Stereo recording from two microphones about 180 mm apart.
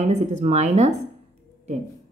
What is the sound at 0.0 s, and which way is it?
Speech, 40° right (ahead or behind).